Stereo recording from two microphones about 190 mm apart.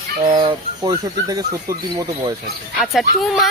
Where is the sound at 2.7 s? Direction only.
Centre (ahead or behind).